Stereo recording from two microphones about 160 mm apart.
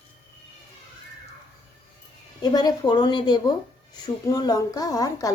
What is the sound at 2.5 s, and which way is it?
Speech, 25° left (ahead or behind).